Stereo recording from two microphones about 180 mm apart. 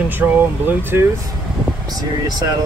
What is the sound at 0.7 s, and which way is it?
Speech, 10° right (ahead or behind).